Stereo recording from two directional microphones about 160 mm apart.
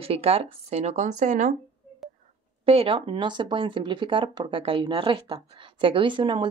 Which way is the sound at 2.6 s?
35° right (ahead or behind).